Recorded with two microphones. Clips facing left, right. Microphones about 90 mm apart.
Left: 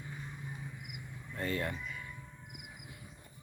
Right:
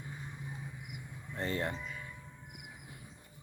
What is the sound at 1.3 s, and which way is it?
Speech, 25° right (ahead or behind).